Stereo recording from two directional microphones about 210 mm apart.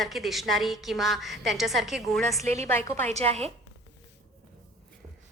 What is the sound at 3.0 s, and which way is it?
Speech, 30° right (ahead or behind).